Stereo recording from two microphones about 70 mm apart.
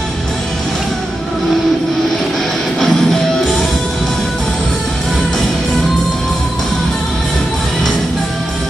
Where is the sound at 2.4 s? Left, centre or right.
Centre.